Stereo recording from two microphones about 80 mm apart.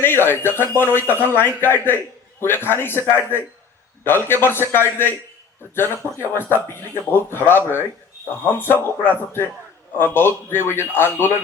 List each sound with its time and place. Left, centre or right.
0.0 s speech: left